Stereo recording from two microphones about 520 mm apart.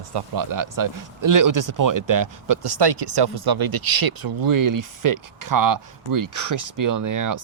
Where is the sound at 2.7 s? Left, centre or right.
Right.